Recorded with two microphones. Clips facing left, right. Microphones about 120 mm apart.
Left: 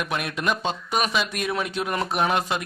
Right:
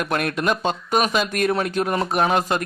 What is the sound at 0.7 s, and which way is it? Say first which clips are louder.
Speech: right 4 dB; 45° right (ahead or behind).